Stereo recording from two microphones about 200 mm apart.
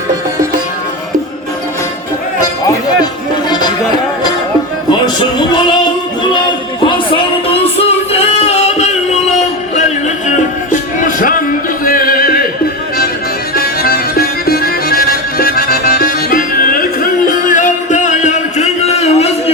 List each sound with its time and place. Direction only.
6.8 s music: 25° left (ahead or behind); by 11.3 s 40° left (ahead or behind)
11.9 s a sound: 45° left (ahead or behind)
13.6 s music: 50° left (ahead or behind); by 19.3 s 30° left (ahead or behind)